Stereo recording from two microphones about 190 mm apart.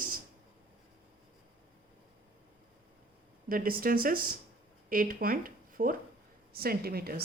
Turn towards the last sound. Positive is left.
turn(degrees=-55)  # may be behind; listen again after turning